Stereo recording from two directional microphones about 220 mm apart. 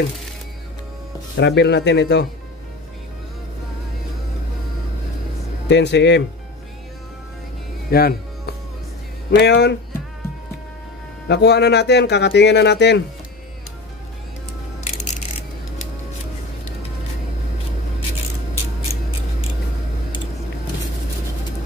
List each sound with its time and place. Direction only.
1.3 s speech: 50° left (ahead or behind)
5.7 s speech: 50° left (ahead or behind)
7.9 s music: 45° left (ahead or behind)
9.4 s speech: 50° left (ahead or behind)
11.2 s speech: 50° left (ahead or behind)
14.8 s a sound: 30° left (ahead or behind)